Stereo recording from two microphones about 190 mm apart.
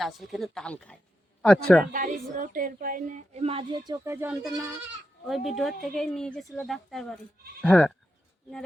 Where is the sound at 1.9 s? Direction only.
45° right (ahead or behind); by 4.5 s 10° right (ahead or behind).